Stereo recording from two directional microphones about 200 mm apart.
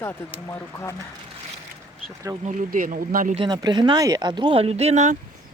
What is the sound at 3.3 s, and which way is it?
Speech, 20° right (ahead or behind).